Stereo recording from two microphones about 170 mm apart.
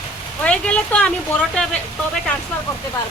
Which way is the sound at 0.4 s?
5° left (ahead or behind).